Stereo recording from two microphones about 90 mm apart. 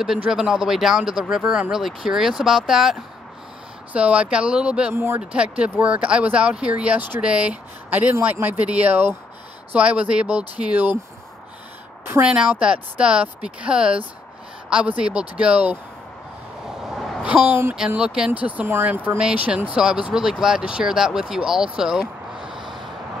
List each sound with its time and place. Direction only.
0.3 s speech: 5° right (ahead or behind)
4.9 s a woman's voice: 25° right (ahead or behind)
5.3 s speech: 10° right (ahead or behind)
12.1 s speech: 15° right (ahead or behind)
16.9 s a sound: centre (ahead or behind)
17.2 s a woman's voice: 20° right (ahead or behind)
17.7 s speech: 10° right (ahead or behind)